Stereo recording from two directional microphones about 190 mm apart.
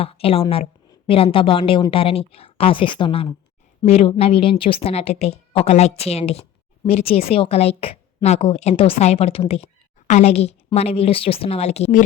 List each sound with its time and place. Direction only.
0.0 s a woman's voice: 30° left (ahead or behind)